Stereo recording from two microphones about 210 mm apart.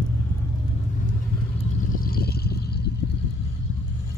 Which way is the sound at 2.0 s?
45° left (ahead or behind).